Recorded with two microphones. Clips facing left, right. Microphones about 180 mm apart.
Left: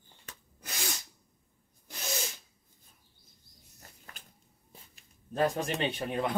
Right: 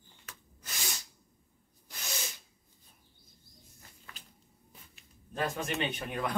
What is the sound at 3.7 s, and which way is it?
Bird, 40° left (ahead or behind).